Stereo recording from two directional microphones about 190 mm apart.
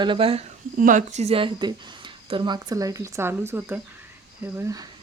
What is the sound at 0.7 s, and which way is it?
A woman's voice, 40° right (ahead or behind).